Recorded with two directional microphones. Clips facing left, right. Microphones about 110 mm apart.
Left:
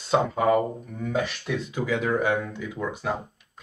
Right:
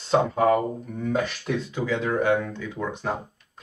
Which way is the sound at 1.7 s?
10° left (ahead or behind).